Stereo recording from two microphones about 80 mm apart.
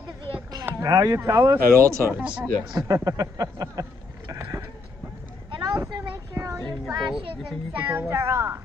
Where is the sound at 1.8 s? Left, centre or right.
Right.